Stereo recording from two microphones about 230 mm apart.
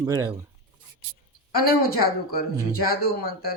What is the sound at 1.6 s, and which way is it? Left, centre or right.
Speech, left.